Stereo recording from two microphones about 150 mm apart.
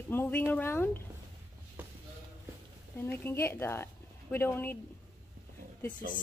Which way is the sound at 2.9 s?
15° left (ahead or behind).